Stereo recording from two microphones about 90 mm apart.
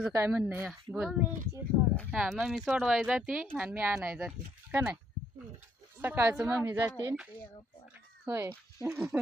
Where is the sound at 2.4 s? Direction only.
5° right (ahead or behind); by 3.9 s 20° right (ahead or behind).